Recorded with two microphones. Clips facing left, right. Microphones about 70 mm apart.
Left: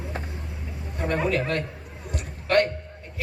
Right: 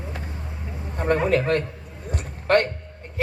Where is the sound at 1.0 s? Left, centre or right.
Right.